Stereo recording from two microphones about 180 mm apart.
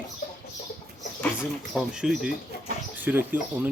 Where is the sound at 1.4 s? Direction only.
5° right (ahead or behind).